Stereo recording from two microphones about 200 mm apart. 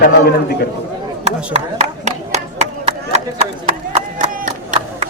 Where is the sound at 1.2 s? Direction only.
30° right (ahead or behind).